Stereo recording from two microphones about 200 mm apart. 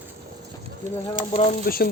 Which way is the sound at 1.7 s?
45° left (ahead or behind).